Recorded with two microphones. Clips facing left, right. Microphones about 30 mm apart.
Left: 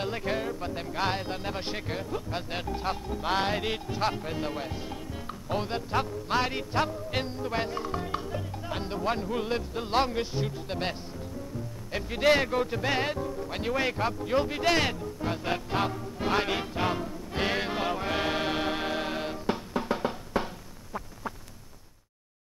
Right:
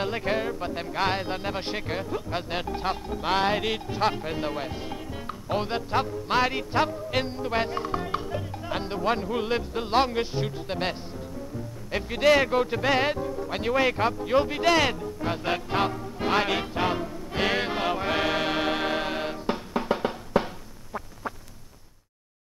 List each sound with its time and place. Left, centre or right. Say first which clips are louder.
0.0 s speech: right 4 dB; centre
6.8 s music: right 4 dB; right
12.4 s music: right 4 dB; centre
13.1 s speech: right 3 dB; centre
13.8 s music: right 4 dB; right
15.0 s speech: right 3 dB; centre
16.7 s music: right 3 dB; centre